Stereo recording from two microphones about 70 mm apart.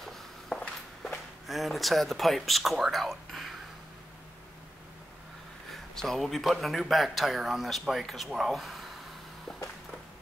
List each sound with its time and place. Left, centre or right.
0.5 s walk: centre
1.5 s speech: centre
5.9 s speech: centre
9.5 s a sound: centre